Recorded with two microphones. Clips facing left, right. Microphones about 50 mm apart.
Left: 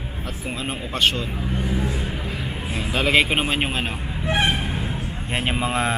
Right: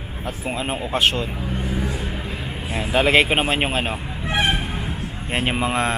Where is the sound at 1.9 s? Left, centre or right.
Centre.